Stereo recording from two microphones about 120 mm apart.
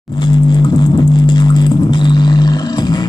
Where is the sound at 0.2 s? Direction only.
40° left (ahead or behind).